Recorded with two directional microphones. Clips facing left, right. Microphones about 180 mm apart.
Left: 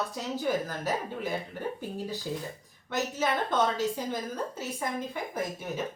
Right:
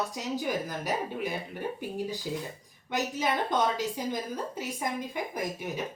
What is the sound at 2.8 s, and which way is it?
A woman's voice, 15° right (ahead or behind).